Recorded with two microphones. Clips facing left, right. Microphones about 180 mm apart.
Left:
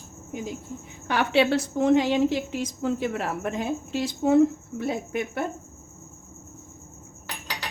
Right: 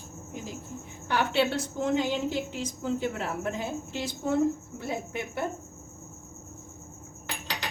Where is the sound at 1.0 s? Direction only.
75° left (ahead or behind).